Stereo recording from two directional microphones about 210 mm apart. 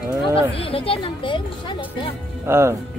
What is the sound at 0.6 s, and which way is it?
Speech, 25° left (ahead or behind).